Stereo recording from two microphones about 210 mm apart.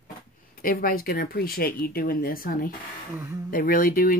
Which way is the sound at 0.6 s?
45° left (ahead or behind).